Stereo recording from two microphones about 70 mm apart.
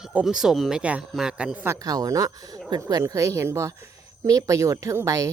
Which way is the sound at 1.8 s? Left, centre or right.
Right.